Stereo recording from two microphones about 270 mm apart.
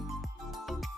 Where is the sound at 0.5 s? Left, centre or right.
Centre.